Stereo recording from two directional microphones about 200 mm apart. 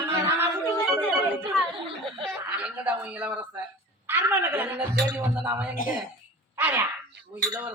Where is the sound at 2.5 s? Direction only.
5° right (ahead or behind).